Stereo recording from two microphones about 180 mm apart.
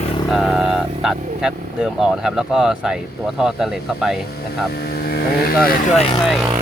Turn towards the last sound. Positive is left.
turn(degrees=0)  # may be behind; listen again after turning